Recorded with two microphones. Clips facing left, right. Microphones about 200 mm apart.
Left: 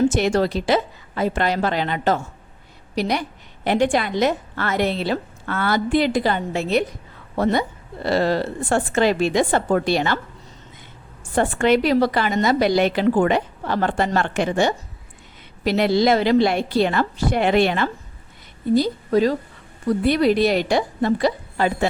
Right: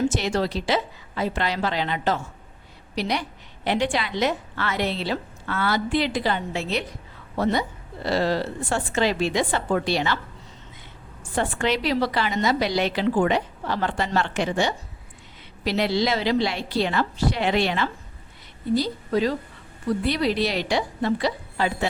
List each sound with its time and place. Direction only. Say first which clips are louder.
0.1 s a woman's voice: left 5 dB; 50° left (ahead or behind)
11.2 s a woman's voice: left 5 dB; 50° left (ahead or behind)